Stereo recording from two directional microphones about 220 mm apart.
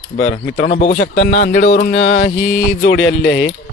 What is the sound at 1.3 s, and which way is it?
Speech, 35° left (ahead or behind).